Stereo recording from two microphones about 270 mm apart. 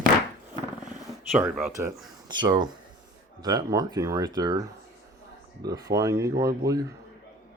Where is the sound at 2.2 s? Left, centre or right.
Centre.